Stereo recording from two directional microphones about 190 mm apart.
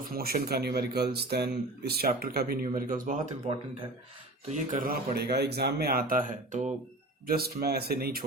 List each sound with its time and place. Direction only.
0.1 s speech: 55° right (ahead or behind)
4.4 s speech: 40° right (ahead or behind)
5.1 s speech: 60° right (ahead or behind); by 6.7 s 40° right (ahead or behind)
7.3 s speech: 55° right (ahead or behind)